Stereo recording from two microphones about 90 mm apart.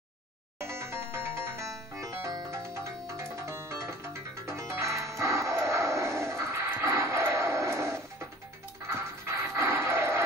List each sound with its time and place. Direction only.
0.6 s music: 30° right (ahead or behind)
9.2 s music: 30° right (ahead or behind)